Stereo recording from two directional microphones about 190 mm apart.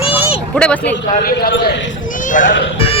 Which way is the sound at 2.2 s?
45° left (ahead or behind).